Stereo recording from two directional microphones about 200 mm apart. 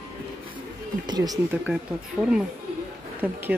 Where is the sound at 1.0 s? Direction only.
20° right (ahead or behind).